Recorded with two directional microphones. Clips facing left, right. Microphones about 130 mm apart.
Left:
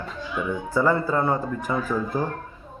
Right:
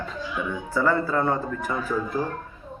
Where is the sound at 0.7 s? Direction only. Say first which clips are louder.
Left 1 dB; 15° left (ahead or behind).